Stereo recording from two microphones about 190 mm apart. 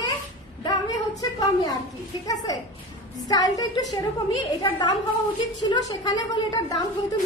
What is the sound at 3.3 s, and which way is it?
A woman's voice, 20° left (ahead or behind).